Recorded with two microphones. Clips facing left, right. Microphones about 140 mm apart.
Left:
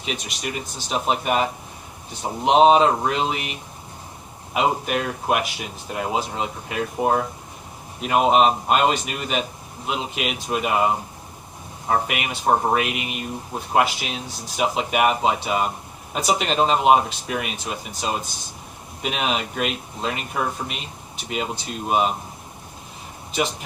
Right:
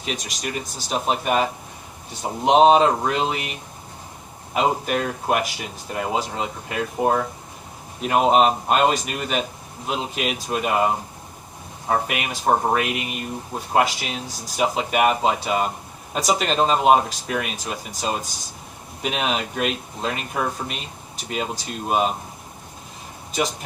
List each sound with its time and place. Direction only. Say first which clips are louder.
0.1 s speech: right 1 dB; 40° right (ahead or behind)
4.5 s speech: even; 40° right (ahead or behind)
8.0 s speech: even; 40° right (ahead or behind)